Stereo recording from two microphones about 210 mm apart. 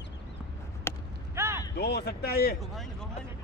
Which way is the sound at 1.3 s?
10° right (ahead or behind).